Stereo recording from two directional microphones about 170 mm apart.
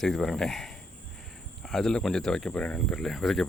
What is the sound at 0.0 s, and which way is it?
Speech, centre (ahead or behind).